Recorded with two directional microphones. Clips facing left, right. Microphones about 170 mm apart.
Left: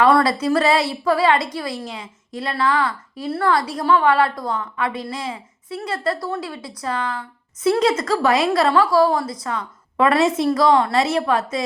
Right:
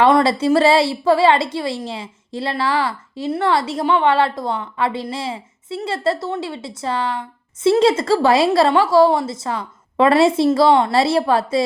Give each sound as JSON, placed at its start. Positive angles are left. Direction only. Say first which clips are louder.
{"t": 0.0, "sound": "a woman's voice", "louder": "right 2 dB", "side_deg": -25}